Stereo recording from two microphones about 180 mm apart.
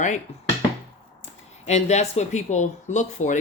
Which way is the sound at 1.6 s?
40° left (ahead or behind).